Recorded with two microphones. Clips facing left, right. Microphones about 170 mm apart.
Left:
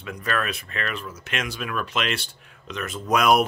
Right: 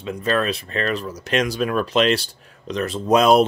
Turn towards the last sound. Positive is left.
turn(degrees=-30)  # may be behind; listen again after turning